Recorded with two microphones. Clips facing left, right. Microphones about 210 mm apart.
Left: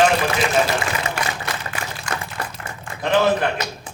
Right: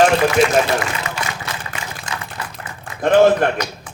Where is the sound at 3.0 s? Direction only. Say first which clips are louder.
Right 6 dB; 50° right (ahead or behind).